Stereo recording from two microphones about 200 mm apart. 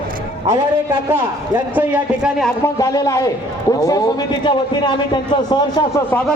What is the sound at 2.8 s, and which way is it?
Speech, 15° left (ahead or behind).